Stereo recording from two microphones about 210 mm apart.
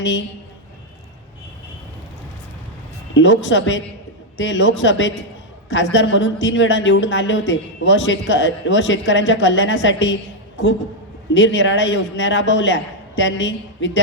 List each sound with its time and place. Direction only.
0.0 s speech: 60° left (ahead or behind)
3.2 s speech: 60° left (ahead or behind)
11.3 s speech: 60° left (ahead or behind)